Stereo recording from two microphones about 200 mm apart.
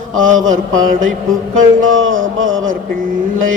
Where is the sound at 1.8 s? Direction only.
80° right.